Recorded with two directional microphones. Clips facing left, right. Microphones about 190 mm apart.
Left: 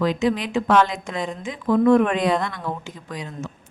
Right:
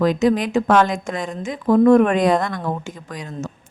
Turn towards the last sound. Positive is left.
turn(degrees=-45)  # may be behind; listen again after turning